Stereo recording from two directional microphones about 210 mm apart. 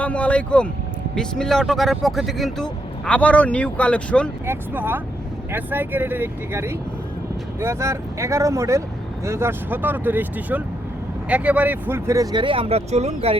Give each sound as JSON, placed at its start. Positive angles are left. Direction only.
{"t": 0.0, "sound": "speech", "side_deg": 5}
{"t": 4.4, "sound": "speech", "side_deg": -10}